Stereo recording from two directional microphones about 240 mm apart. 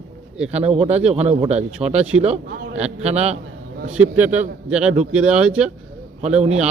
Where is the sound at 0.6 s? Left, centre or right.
Right.